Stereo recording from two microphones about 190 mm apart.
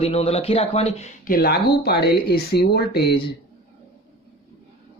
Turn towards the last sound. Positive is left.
turn(degrees=60)  # may be behind; listen again after turning